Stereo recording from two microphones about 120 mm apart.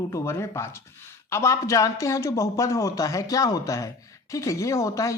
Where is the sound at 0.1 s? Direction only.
20° left (ahead or behind).